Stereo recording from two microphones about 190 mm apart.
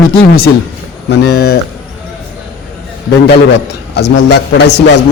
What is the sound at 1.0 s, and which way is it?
Speech, 60° left (ahead or behind).